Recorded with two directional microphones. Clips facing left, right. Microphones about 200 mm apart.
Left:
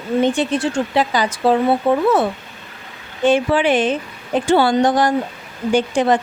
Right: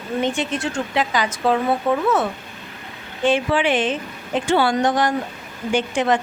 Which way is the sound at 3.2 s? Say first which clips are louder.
Left 4 dB; 40° left (ahead or behind).